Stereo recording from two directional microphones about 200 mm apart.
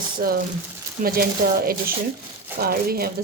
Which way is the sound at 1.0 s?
45° right (ahead or behind).